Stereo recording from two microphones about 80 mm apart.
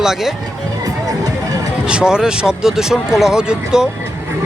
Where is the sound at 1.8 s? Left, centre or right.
Centre.